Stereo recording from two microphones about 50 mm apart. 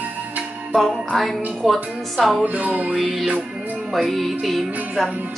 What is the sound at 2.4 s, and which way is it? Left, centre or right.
Music, right.